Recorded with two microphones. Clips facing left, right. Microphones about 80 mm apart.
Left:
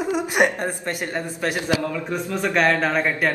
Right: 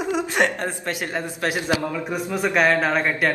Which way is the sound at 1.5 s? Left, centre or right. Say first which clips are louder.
Left 1 dB; right.